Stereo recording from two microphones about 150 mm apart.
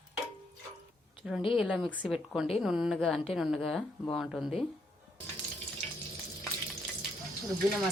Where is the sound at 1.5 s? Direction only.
5° right (ahead or behind).